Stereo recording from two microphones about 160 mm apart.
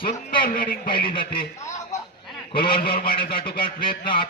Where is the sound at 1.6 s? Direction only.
20° left (ahead or behind).